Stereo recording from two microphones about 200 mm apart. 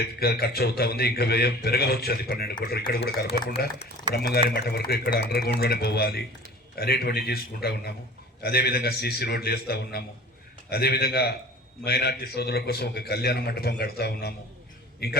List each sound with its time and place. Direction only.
0.0 s a man's voice: 50° left (ahead or behind)